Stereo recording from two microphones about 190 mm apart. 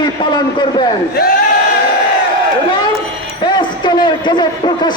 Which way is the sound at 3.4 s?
25° left (ahead or behind).